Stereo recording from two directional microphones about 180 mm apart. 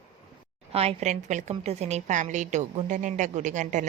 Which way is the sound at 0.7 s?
35° right (ahead or behind).